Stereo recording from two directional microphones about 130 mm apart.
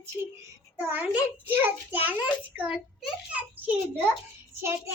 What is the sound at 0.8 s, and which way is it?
A woman's voice, 15° right (ahead or behind).